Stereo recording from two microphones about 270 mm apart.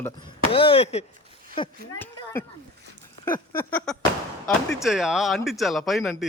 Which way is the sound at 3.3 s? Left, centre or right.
Centre.